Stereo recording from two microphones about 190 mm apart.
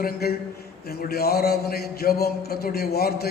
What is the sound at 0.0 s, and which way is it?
A man's voice, 55° left (ahead or behind).